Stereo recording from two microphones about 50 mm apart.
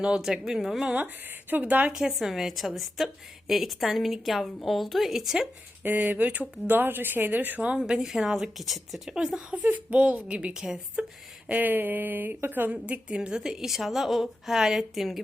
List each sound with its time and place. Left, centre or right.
0.2 s a woman's voice: centre
0.9 s a woman's voice: right
1.9 s a woman's voice: centre
5.8 s speech: right
6.7 s speech: right
7.6 s a woman's voice: centre
7.9 s a woman's voice: centre
9.6 s a woman's voice: right; by 11.0 s centre
11.4 s speech: right
12.8 s a woman's voice: right; by 15.2 s centre